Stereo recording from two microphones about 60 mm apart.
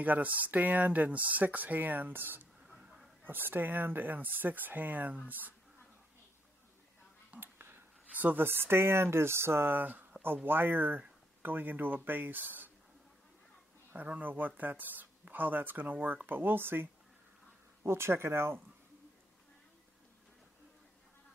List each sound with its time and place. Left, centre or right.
0.0 s speech: right
7.2 s speech: right
13.9 s speech: right